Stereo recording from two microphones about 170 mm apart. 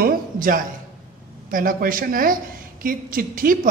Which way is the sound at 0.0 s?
55° right (ahead or behind).